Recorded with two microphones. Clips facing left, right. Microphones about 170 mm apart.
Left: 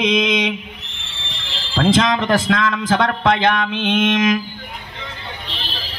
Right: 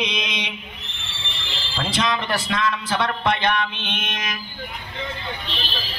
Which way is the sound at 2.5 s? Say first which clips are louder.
Left 6 dB; 90° left.